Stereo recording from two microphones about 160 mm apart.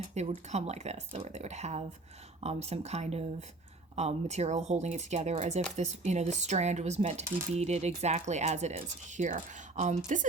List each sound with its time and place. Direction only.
0.1 s speech: 45° right (ahead or behind)